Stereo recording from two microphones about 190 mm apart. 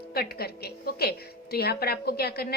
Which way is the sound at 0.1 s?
55° left (ahead or behind).